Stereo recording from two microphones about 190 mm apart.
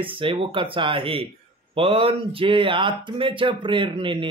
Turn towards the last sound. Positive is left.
turn(degrees=-25)  # may be behind; listen again after turning